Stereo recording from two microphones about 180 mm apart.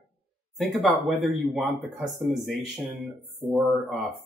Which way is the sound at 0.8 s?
Centre (ahead or behind).